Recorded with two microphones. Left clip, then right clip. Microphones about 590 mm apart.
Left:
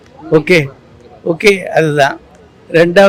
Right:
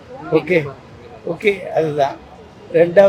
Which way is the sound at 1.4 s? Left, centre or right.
Left.